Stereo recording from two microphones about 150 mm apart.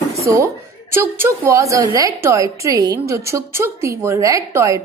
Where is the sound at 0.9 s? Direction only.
15° right (ahead or behind).